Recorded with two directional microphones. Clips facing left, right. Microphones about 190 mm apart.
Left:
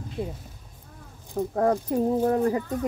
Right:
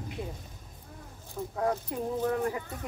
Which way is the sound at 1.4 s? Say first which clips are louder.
Left 7 dB; 45° left (ahead or behind).